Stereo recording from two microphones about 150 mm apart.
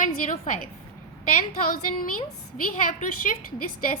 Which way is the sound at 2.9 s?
60° left (ahead or behind).